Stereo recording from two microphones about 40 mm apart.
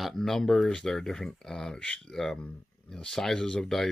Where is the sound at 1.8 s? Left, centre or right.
Left.